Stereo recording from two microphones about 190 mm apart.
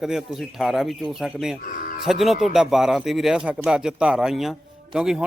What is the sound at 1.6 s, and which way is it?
Cattle, 45° left (ahead or behind).